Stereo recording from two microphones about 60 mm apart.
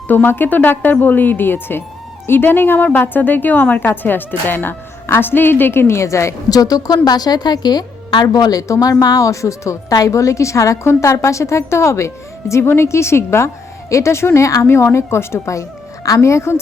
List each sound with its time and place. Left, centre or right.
0.1 s a woman's voice: left
5.9 s a woman's voice: left
8.3 s a woman's voice: left
16.0 s a woman's voice: left